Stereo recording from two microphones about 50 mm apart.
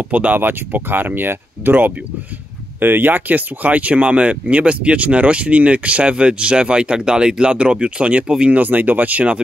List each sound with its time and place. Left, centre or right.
0.1 s speech: right
0.4 s speech: right